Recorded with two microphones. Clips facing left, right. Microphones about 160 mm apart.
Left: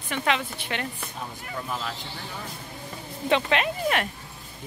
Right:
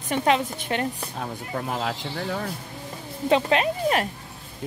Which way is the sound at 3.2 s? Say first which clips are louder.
Right 3 dB; 35° right (ahead or behind).